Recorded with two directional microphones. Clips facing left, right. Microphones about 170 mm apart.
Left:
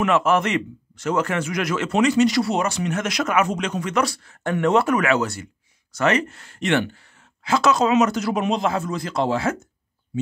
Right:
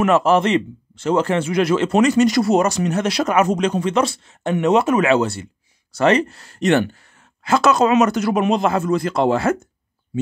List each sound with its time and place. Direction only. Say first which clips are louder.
0.0 s speech: right 4 dB; 35° right (ahead or behind)
2.0 s speech: right 1 dB; 45° right (ahead or behind)